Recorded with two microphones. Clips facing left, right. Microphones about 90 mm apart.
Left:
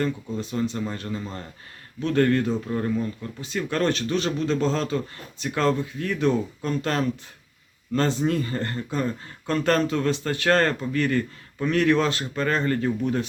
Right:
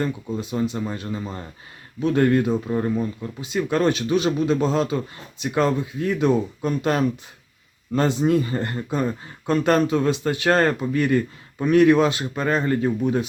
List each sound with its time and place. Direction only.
0.0 s speech: 15° right (ahead or behind)